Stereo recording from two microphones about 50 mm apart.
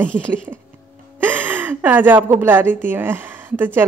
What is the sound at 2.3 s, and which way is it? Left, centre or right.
A woman's voice, right.